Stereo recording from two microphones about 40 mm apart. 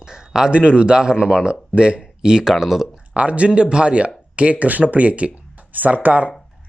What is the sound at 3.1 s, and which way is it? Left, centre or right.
Speech, right.